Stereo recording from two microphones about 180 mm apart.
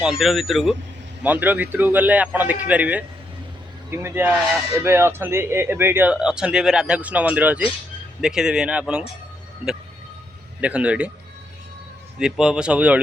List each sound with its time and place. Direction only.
0.0 s speech: centre (ahead or behind)
10.6 s speech: 5° right (ahead or behind)
12.2 s speech: 5° right (ahead or behind)